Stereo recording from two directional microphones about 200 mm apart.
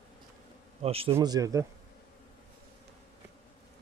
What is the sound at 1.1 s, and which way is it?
Speech, 15° right (ahead or behind).